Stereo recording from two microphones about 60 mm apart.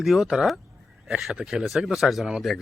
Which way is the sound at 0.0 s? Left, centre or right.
Centre.